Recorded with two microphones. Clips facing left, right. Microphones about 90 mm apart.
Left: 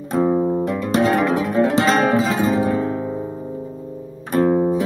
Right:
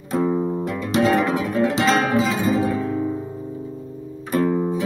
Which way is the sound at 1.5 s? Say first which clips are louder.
Left 2 dB; 30° left (ahead or behind).